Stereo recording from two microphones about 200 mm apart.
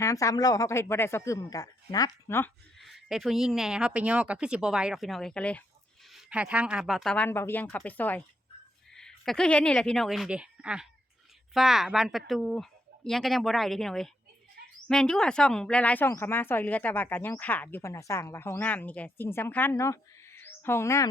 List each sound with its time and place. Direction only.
0.0 s speech: 15° left (ahead or behind)
2.7 s a woman's voice: centre (ahead or behind)